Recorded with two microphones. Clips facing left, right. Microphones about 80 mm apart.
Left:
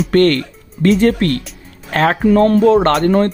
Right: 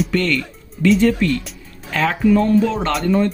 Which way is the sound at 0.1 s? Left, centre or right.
Left.